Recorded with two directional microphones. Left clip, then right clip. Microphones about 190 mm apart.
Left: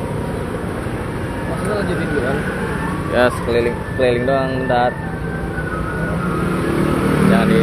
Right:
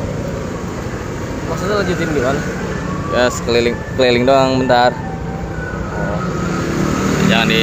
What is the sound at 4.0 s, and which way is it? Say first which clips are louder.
Speech: right 5 dB; 30° right (ahead or behind).